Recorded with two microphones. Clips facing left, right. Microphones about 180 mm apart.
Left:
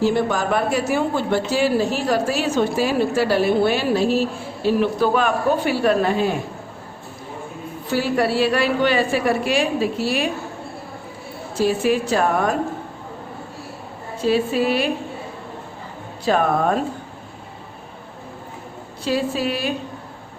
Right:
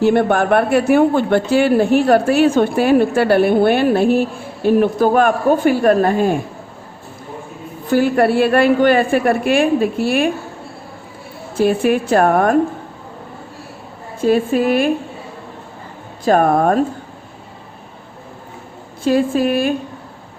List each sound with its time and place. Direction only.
0.0 s speech: 60° right (ahead or behind)
7.9 s a woman's voice: 55° right (ahead or behind)
11.5 s speech: 55° right (ahead or behind)
14.2 s a woman's voice: 50° right (ahead or behind)
16.2 s a woman's voice: 45° right (ahead or behind)
19.0 s a woman's voice: 50° right (ahead or behind)